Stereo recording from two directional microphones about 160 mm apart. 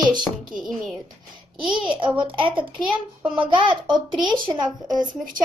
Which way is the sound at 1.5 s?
30° right (ahead or behind).